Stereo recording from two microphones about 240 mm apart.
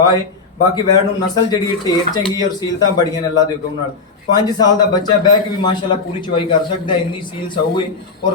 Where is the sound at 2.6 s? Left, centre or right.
Centre.